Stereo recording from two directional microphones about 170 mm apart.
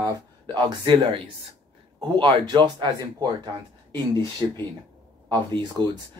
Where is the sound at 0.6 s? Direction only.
30° right (ahead or behind).